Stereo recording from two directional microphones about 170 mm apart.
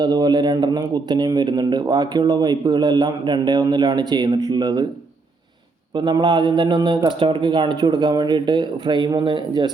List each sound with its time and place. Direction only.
0.0 s speech: 25° right (ahead or behind)
6.0 s speech: 25° right (ahead or behind)